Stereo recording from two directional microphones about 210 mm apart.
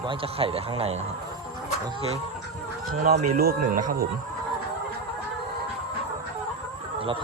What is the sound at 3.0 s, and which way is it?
Speech, 45° right (ahead or behind).